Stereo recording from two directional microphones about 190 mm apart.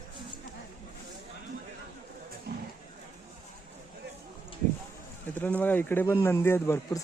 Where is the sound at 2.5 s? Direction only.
55° right (ahead or behind).